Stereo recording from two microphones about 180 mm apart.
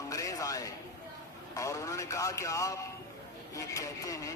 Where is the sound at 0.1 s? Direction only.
20° left (ahead or behind).